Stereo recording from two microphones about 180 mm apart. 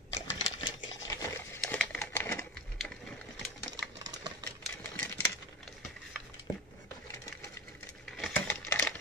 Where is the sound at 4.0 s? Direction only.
25° right (ahead or behind).